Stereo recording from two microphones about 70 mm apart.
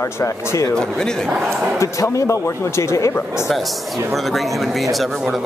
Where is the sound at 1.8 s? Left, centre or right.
Left.